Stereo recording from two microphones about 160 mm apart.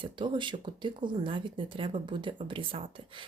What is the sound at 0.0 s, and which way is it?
Speech, 30° right (ahead or behind).